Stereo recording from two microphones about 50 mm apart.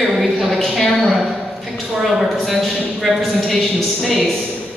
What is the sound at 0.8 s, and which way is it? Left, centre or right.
Speech, centre.